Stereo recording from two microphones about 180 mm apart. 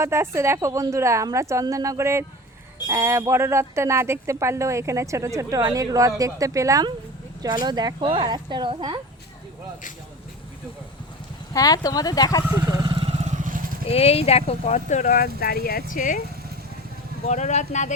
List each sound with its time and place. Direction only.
0.0 s speech: 15° right (ahead or behind)
11.5 s speech: 20° left (ahead or behind)
12.5 s vehicle: 25° right (ahead or behind)
13.2 s vehicle: 45° right (ahead or behind)
13.8 s speech: 35° left (ahead or behind)
17.2 s speech: 40° left (ahead or behind)